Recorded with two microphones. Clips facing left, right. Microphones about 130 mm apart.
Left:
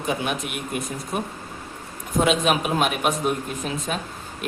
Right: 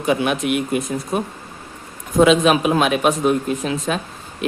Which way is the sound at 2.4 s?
90° right.